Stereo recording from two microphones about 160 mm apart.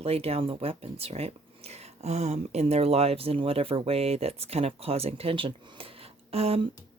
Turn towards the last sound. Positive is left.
turn(degrees=-40)  # may be behind; listen again after turning